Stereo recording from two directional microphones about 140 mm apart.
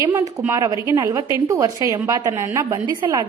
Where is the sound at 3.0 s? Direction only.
35° right (ahead or behind).